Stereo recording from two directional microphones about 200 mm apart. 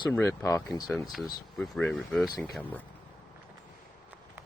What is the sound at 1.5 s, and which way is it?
Speech, centre (ahead or behind).